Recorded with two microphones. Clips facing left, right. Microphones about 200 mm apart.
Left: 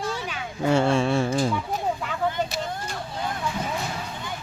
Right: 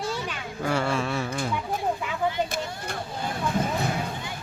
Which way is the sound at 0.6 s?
25° left (ahead or behind).